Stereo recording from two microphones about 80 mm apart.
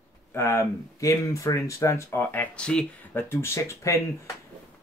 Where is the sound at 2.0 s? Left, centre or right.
Left.